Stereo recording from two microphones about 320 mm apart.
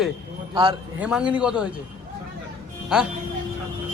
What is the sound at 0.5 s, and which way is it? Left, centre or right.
Speech, centre.